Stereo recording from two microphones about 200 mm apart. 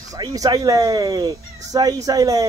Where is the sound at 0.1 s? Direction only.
15° right (ahead or behind).